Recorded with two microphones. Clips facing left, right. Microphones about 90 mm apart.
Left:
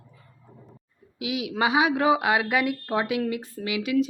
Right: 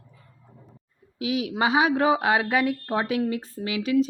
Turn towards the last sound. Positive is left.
turn(degrees=-35)  # may be behind; listen again after turning